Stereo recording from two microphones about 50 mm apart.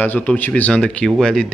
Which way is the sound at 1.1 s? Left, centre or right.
Centre.